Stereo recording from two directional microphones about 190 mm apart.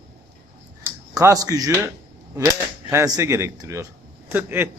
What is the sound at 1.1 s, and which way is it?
Speech, 20° right (ahead or behind).